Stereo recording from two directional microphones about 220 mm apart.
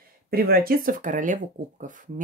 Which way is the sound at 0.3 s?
40° right (ahead or behind).